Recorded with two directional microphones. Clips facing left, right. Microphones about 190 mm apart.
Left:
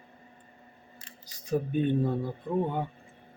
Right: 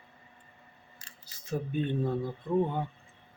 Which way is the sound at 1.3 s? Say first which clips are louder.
Left 5 dB; 15° left (ahead or behind).